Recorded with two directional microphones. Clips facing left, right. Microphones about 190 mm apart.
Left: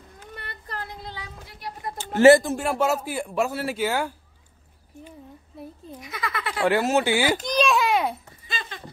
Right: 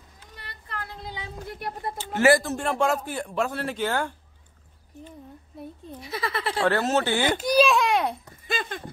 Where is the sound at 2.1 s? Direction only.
25° left (ahead or behind).